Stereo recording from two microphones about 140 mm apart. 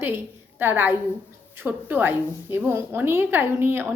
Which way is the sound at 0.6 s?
15° right (ahead or behind).